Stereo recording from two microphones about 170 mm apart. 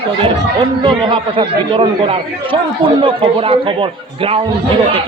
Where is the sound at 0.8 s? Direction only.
30° right (ahead or behind).